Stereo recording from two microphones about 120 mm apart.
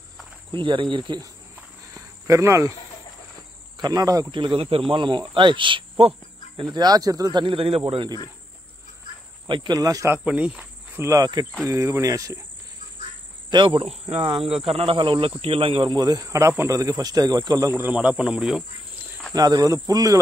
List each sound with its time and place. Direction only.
0.5 s speech: 45° right (ahead or behind)
2.0 s cricket: 25° right (ahead or behind)
3.7 s speech: 35° right (ahead or behind)
4.3 s speech: 40° right (ahead or behind)
9.5 s speech: 40° right (ahead or behind)
10.1 s speech: 10° right (ahead or behind); by 12.4 s 30° right (ahead or behind)
13.5 s speech: 40° right (ahead or behind)
13.8 s speech: 55° right (ahead or behind); by 17.6 s 35° right (ahead or behind)
17.6 s speech: 15° right (ahead or behind)
19.3 s speech: 35° right (ahead or behind)